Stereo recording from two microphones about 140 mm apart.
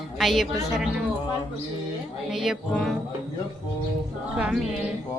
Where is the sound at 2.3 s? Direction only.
Centre (ahead or behind).